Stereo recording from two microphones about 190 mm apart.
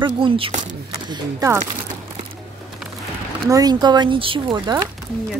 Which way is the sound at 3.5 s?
20° right (ahead or behind).